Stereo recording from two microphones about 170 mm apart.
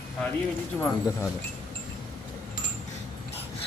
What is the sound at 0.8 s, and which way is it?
Speech, 20° left (ahead or behind).